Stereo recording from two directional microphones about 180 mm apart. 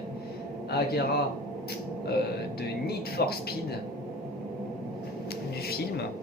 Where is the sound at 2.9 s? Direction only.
60° left (ahead or behind).